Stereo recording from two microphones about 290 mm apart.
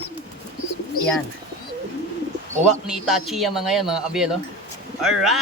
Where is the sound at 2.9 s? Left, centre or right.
Centre.